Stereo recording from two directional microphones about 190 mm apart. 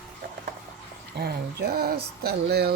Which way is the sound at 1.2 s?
55° right (ahead or behind).